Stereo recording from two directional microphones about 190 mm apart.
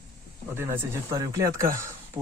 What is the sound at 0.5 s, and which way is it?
Speech, 15° right (ahead or behind).